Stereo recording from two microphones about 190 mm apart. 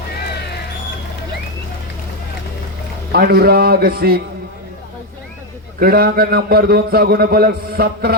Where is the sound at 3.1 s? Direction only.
55° right (ahead or behind).